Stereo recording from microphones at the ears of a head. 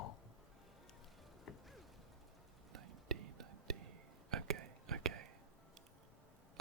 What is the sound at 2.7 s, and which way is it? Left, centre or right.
Whispering, right.